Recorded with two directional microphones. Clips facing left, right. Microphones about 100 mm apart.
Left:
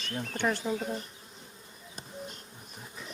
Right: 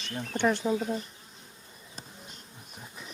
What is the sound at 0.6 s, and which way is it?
Speech, 5° right (ahead or behind).